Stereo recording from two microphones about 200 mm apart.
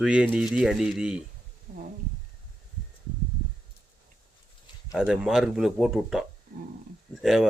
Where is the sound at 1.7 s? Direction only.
35° right (ahead or behind).